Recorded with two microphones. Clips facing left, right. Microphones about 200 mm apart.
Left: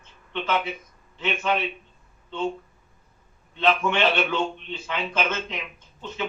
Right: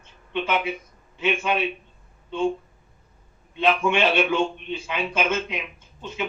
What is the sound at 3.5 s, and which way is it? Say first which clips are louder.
A man's voice: right 1 dB; 10° right (ahead or behind).